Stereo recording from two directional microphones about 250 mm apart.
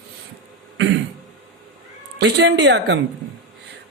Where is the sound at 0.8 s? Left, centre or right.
Right.